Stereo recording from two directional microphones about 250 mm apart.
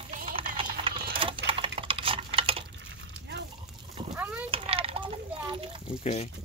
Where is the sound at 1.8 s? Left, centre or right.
Right.